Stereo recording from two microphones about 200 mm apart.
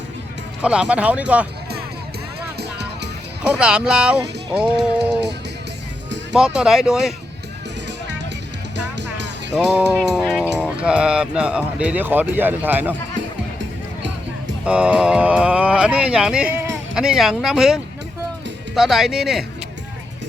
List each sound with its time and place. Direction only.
0.6 s speech: 5° right (ahead or behind)
2.6 s music: 55° right (ahead or behind)
3.4 s speech: 5° right (ahead or behind)
6.3 s speech: 5° right (ahead or behind)
8.7 s music: 60° right (ahead or behind)
9.6 s speech: 5° right (ahead or behind)
14.6 s speech: 5° right (ahead or behind)